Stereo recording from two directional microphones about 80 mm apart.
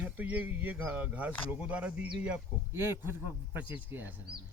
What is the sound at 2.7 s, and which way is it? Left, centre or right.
Speech, right.